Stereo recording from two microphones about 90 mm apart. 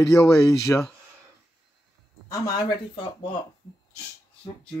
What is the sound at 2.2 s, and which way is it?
Speech, 40° left (ahead or behind).